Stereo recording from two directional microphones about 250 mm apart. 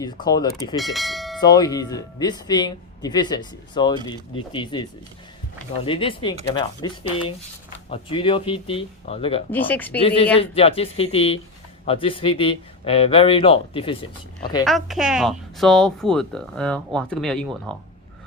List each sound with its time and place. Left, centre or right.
0.0 s speech: centre
0.8 s speech: centre
1.4 s speech: centre
9.5 s speech: centre
10.0 s speech: left
14.6 s speech: centre